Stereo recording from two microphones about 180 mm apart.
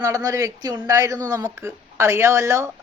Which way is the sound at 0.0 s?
20° right (ahead or behind).